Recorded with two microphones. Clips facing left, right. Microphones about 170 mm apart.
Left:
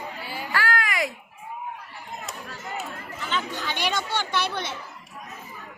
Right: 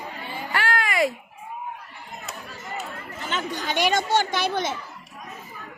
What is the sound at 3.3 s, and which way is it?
Speech, 45° right (ahead or behind).